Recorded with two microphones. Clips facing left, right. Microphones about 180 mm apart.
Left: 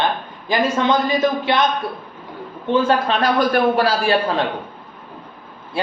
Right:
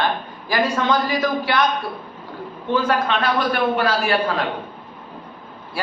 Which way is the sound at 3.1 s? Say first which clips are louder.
Left 3 dB; 40° left (ahead or behind).